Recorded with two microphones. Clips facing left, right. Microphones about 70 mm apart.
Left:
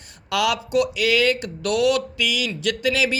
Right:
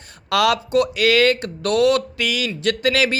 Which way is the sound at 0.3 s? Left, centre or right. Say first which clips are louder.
Right 4 dB; right.